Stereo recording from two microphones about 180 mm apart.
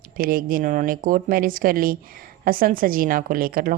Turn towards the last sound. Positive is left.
turn(degrees=-50)  # may be behind; listen again after turning